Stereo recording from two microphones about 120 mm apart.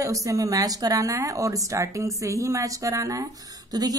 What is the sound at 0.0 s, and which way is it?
A woman's voice, 25° right (ahead or behind).